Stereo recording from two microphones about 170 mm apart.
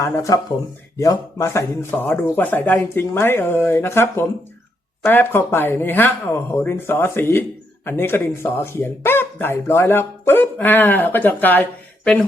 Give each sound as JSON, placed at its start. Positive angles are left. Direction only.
{"t": 0.0, "sound": "speech", "side_deg": 20}